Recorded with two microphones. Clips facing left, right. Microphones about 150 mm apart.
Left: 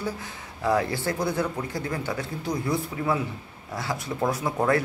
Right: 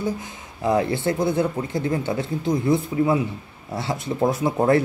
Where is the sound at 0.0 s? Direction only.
20° right (ahead or behind).